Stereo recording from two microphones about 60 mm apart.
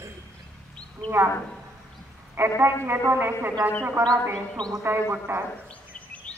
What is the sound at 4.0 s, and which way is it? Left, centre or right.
Speech, right.